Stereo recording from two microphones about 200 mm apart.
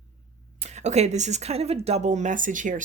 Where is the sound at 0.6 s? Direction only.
35° right (ahead or behind).